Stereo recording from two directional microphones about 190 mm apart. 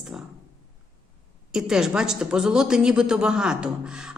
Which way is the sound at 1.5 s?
5° right (ahead or behind).